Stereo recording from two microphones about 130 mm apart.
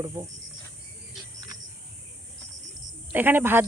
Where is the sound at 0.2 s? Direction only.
25° right (ahead or behind).